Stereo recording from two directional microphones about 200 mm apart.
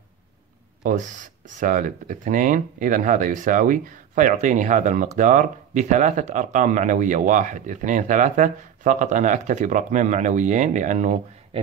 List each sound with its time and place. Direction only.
0.8 s speech: 40° right (ahead or behind)